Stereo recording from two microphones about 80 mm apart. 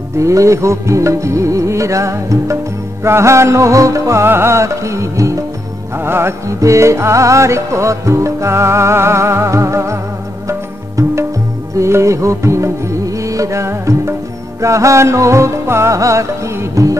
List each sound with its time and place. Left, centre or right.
0.2 s music: right
5.9 s music: right
11.7 s music: right